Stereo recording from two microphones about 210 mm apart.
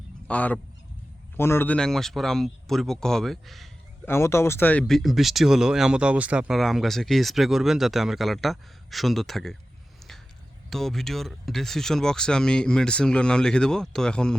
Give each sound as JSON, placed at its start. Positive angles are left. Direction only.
{"t": 0.3, "sound": "speech", "side_deg": 5}
{"t": 4.0, "sound": "speech", "side_deg": 10}
{"t": 10.7, "sound": "speech", "side_deg": 0}